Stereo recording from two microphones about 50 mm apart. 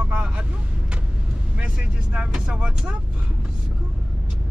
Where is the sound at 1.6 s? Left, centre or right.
Centre.